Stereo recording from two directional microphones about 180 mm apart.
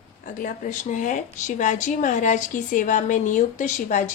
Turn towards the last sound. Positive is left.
turn(degrees=45)  # may be behind; listen again after turning